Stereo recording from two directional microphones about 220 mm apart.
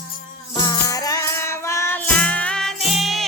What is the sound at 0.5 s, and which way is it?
Music, 20° left (ahead or behind).